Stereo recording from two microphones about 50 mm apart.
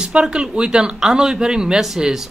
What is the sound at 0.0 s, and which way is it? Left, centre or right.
Speech, centre.